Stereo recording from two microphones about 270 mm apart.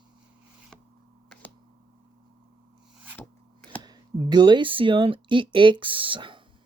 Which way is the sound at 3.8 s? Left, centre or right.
Centre.